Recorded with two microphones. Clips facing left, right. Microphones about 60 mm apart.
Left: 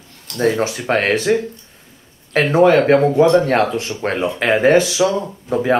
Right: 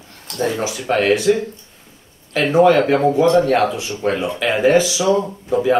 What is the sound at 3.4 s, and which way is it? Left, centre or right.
Speech, left.